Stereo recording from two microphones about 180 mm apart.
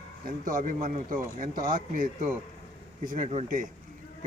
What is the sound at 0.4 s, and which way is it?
Speech, 50° right (ahead or behind).